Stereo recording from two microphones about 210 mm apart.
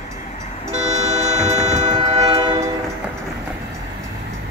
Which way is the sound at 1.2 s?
35° right (ahead or behind).